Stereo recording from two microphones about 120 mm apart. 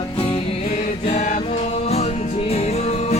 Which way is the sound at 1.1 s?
75° left (ahead or behind).